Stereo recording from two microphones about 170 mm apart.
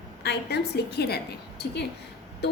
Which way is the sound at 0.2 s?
75° left (ahead or behind).